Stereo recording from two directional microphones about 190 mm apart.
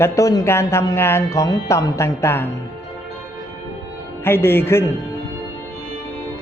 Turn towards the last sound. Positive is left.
turn(degrees=10)  # may be behind; listen again after turning